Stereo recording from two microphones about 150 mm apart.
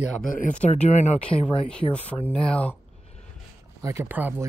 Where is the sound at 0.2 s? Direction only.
65° left (ahead or behind).